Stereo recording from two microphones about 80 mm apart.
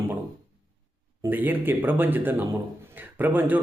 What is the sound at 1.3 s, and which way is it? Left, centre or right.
Speech, right.